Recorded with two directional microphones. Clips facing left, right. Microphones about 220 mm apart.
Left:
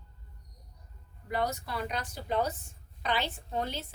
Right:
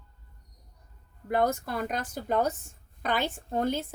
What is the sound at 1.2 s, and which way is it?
A woman's voice, 50° right (ahead or behind).